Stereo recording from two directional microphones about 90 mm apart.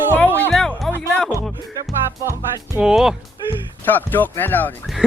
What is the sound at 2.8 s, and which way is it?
Speech, 5° right (ahead or behind).